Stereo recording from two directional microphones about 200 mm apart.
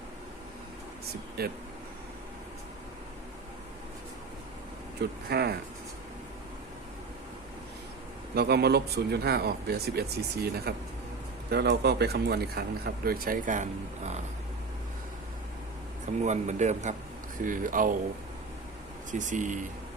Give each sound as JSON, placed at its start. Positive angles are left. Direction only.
{"t": 1.4, "sound": "speech", "side_deg": -50}
{"t": 4.9, "sound": "speech", "side_deg": -55}
{"t": 8.4, "sound": "speech", "side_deg": -55}
{"t": 16.2, "sound": "speech", "side_deg": -35}
{"t": 19.2, "sound": "speech", "side_deg": -40}